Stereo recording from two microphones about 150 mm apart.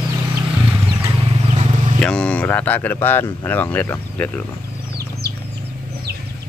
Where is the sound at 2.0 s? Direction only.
5° left (ahead or behind).